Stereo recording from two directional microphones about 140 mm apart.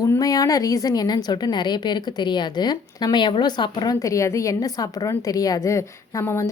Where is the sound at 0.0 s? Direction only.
25° left (ahead or behind).